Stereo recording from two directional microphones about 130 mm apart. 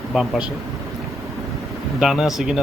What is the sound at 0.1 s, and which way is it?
Speech, 5° right (ahead or behind).